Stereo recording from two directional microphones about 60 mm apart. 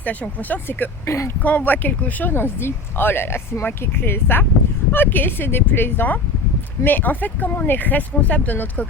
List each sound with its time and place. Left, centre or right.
0.0 s speech: left
1.0 s speech: left
1.4 s speech: left